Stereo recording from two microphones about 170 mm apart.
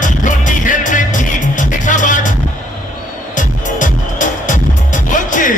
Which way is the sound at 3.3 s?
50° left (ahead or behind).